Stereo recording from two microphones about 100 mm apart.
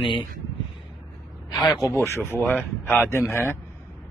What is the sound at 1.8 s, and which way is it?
Speech, 25° left (ahead or behind).